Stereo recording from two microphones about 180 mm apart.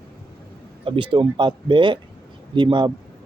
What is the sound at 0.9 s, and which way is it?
A man's voice, 30° right (ahead or behind).